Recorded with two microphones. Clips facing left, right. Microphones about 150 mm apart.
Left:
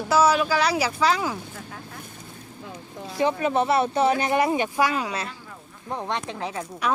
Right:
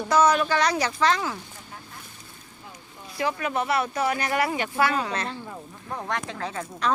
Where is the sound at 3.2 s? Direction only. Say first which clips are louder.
Left 5 dB; 25° left (ahead or behind).